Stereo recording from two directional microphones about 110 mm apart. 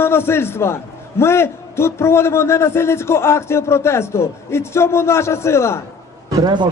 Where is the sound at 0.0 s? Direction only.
20° left (ahead or behind).